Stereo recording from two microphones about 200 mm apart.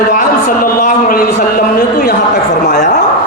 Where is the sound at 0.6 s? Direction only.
45° left (ahead or behind).